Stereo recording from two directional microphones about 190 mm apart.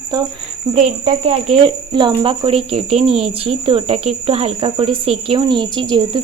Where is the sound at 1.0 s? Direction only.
35° right (ahead or behind).